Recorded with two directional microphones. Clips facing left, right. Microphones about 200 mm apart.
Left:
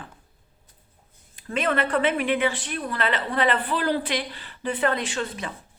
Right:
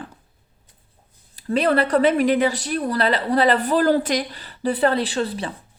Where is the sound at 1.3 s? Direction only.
35° right (ahead or behind).